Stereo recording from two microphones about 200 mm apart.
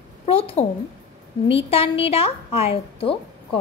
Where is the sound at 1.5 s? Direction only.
30° left (ahead or behind).